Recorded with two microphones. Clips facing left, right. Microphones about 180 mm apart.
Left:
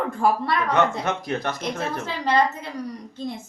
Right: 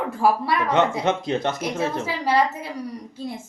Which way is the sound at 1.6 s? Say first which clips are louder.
Right 3 dB; 10° right (ahead or behind).